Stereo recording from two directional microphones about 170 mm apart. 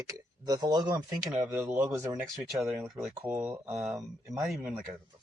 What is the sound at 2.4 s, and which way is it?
Speech, 5° right (ahead or behind).